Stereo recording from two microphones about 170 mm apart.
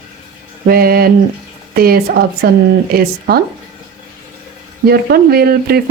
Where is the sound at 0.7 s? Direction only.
60° right (ahead or behind).